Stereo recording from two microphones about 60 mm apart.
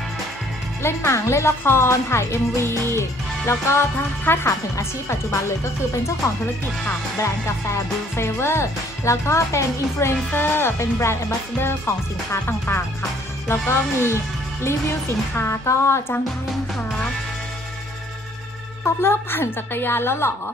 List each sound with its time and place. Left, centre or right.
0.8 s speech: left
1.6 s speech: left
4.2 s speech: left
4.5 s speech: left
7.2 s speech: left
10.3 s speech: left
18.9 s speech: left